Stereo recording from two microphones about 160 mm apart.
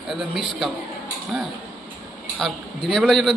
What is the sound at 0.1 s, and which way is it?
Speech, centre (ahead or behind).